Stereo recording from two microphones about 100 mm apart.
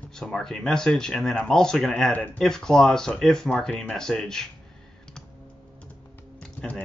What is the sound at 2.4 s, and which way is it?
Speech, 5° left (ahead or behind).